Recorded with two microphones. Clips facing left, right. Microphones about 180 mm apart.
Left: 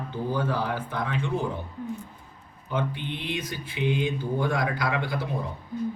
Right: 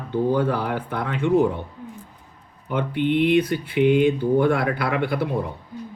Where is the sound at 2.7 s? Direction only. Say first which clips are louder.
Right 8 dB; 60° right (ahead or behind).